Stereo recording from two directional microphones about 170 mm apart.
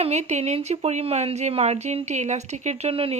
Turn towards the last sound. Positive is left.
turn(degrees=-35)  # may be behind; listen again after turning